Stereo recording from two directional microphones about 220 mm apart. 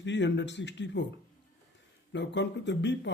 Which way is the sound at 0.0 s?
55° left (ahead or behind).